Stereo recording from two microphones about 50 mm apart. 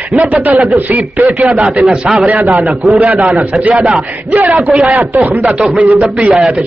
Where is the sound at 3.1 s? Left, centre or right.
Right.